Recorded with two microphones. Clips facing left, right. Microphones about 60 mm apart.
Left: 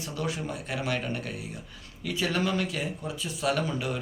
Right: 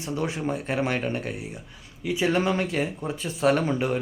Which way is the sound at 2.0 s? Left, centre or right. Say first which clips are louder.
Right 5 dB; right.